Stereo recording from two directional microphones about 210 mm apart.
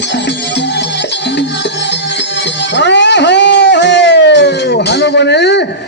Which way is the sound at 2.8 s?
55° left (ahead or behind).